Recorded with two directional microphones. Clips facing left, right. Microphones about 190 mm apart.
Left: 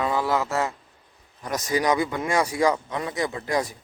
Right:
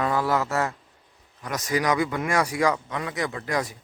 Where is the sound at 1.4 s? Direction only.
35° left (ahead or behind).